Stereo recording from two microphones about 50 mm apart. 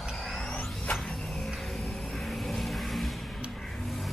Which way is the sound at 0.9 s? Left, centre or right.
Centre.